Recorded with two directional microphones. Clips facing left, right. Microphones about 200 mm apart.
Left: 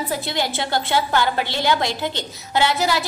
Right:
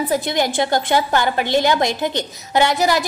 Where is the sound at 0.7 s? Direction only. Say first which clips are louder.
Right 3 dB; 45° right (ahead or behind).